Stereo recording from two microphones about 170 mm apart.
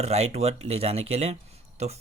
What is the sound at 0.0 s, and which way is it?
Speech, 40° right (ahead or behind).